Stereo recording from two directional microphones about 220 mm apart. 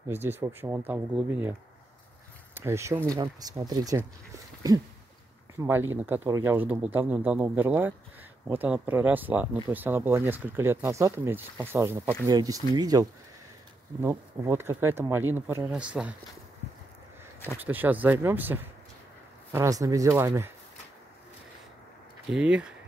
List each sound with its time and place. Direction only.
0.1 s speech: 10° right (ahead or behind)
2.5 s speech: 10° right (ahead or behind)
5.6 s speech: 10° right (ahead or behind)
14.0 s speech: 10° right (ahead or behind)
17.6 s speech: 10° right (ahead or behind)
22.3 s speech: 5° right (ahead or behind)